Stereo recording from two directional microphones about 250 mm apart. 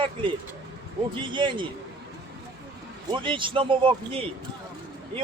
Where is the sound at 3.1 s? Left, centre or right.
Centre.